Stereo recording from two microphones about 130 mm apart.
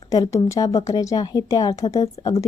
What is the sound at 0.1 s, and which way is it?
A woman's voice, 25° left (ahead or behind).